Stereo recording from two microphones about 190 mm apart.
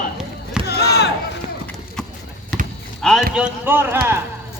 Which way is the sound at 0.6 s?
60° left (ahead or behind).